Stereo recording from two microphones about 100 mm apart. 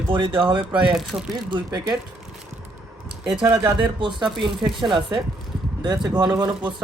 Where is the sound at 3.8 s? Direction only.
55° right (ahead or behind).